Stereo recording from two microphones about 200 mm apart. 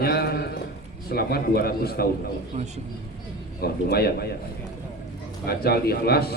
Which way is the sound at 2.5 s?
35° right (ahead or behind).